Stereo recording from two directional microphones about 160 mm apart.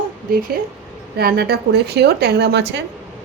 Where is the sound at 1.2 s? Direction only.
75° right (ahead or behind).